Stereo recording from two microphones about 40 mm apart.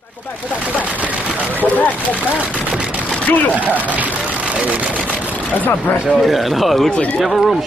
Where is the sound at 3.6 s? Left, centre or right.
Right.